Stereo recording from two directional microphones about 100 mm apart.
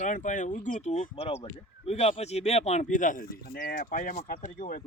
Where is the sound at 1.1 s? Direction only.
75° left (ahead or behind); by 2.8 s 90° left.